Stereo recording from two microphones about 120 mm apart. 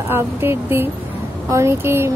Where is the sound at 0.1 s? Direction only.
20° right (ahead or behind).